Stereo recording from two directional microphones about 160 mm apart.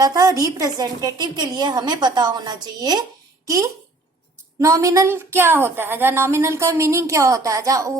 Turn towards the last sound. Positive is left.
turn(degrees=-20)  # may be behind; listen again after turning